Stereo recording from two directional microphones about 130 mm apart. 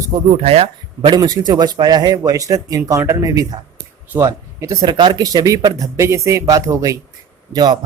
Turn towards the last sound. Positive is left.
turn(degrees=-35)  # may be behind; listen again after turning